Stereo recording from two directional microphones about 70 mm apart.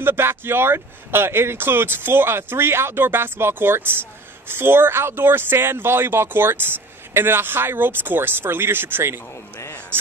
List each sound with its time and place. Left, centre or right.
0.0 s speech: right